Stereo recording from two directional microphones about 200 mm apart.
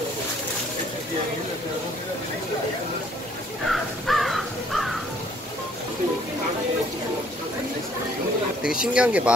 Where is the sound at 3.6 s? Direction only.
Centre (ahead or behind).